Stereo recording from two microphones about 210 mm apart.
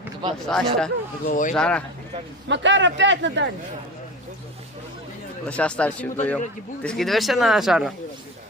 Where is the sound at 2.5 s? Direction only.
60° right (ahead or behind).